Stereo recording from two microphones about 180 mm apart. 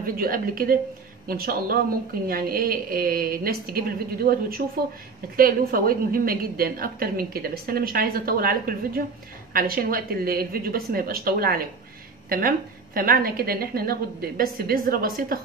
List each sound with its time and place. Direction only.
0.0 s a woman's voice: 55° right (ahead or behind)